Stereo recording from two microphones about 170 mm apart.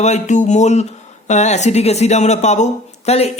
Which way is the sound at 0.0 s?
45° left (ahead or behind).